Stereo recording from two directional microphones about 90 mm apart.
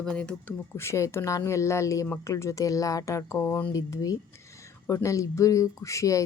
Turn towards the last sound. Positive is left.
turn(degrees=35)  # may be behind; listen again after turning